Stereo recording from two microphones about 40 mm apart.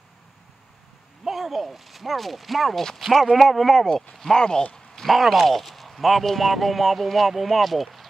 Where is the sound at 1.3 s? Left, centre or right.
Centre.